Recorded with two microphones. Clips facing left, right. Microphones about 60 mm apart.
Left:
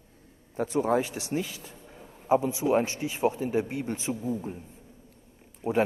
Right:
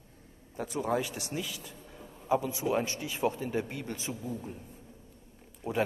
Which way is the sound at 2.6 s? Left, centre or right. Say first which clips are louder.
Left 5 dB; left.